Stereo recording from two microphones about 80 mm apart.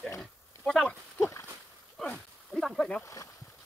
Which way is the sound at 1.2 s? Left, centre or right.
Left.